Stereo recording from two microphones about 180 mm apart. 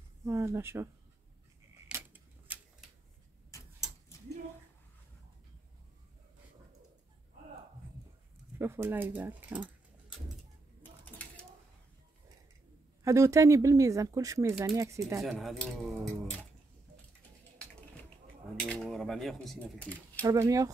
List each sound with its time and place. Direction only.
0.2 s speech: 15° right (ahead or behind)
1.9 s keys jangling: 10° right (ahead or behind)
8.5 s speech: 15° right (ahead or behind)
13.0 s speech: 15° right (ahead or behind)
15.2 s speech: centre (ahead or behind)
18.6 s speech: 5° left (ahead or behind)
20.2 s speech: 20° right (ahead or behind)